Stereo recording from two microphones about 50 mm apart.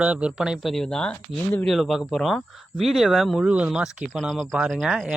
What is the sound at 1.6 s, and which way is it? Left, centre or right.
Speech, centre.